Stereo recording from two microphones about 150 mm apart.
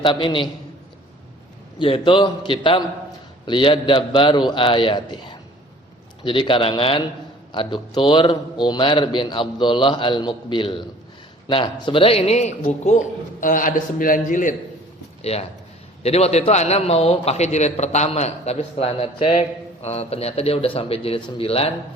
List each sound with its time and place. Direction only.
0.0 s a man's voice: 35° left (ahead or behind)
1.8 s a man's voice: 35° left (ahead or behind); by 13.0 s 50° left (ahead or behind)
13.4 s a man's voice: 65° left (ahead or behind)
15.2 s a man's voice: 45° left (ahead or behind)